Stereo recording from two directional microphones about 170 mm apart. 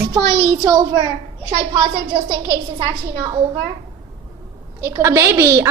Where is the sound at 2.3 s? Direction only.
20° right (ahead or behind).